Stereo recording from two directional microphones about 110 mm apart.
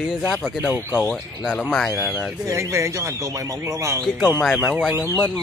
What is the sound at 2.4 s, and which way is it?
Speech, 30° right (ahead or behind).